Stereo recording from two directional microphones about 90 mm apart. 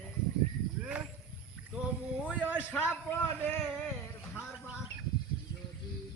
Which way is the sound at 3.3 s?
25° left (ahead or behind).